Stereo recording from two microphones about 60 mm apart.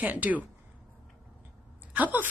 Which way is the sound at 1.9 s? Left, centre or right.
Right.